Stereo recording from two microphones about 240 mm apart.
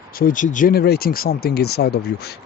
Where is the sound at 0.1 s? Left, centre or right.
Left.